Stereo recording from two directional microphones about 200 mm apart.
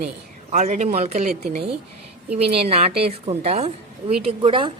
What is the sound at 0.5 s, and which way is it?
Speech, 35° right (ahead or behind).